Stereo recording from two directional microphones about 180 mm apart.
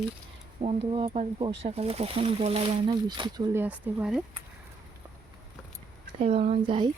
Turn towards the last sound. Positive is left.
turn(degrees=-25)  # may be behind; listen again after turning